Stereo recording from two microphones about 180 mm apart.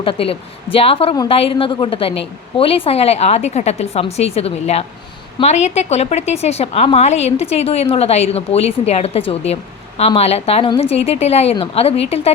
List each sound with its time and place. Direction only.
0.0 s a woman's voice: 30° left (ahead or behind)
1.1 s a woman's voice: 20° left (ahead or behind)